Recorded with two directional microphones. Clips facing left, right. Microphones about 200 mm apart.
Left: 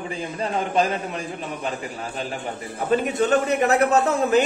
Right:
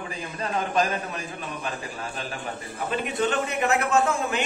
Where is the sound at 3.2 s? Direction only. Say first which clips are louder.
Left 3 dB; 40° left (ahead or behind).